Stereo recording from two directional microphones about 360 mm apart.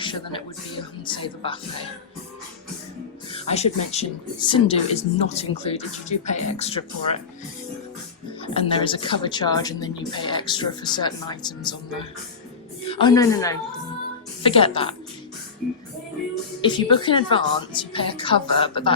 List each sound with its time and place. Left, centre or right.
0.0 s speech: centre
3.3 s speech: centre
8.4 s speech: centre
12.8 s a woman's voice: centre
16.6 s speech: centre